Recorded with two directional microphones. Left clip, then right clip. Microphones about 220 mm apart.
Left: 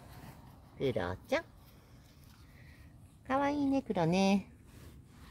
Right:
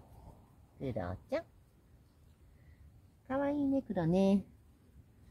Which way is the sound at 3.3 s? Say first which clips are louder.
Left 2 dB; 30° left (ahead or behind).